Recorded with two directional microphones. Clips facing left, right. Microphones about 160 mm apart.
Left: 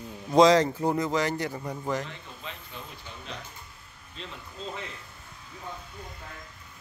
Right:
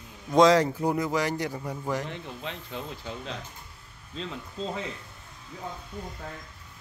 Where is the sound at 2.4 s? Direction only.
90° right.